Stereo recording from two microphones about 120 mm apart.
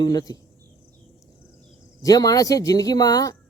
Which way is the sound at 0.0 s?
35° left (ahead or behind).